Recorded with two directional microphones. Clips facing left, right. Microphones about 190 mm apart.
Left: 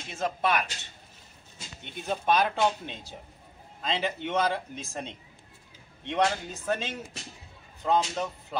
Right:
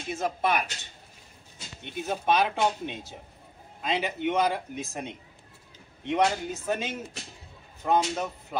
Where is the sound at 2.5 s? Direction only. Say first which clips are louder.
Even; 15° right (ahead or behind).